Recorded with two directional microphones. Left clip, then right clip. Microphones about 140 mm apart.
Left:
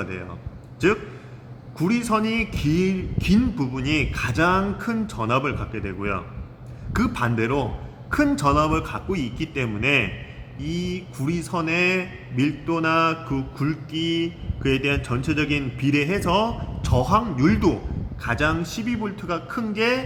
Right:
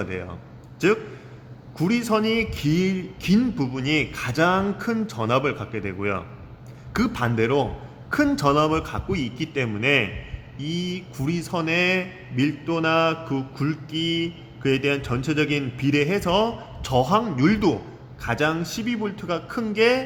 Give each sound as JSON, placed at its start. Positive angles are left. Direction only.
{"t": 0.0, "sound": "a man's voice", "side_deg": -35}